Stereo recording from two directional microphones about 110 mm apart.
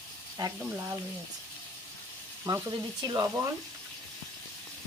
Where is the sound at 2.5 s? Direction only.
35° right (ahead or behind).